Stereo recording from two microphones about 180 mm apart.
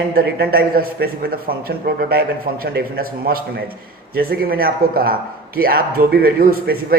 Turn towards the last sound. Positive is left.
turn(degrees=-55)  # may be behind; listen again after turning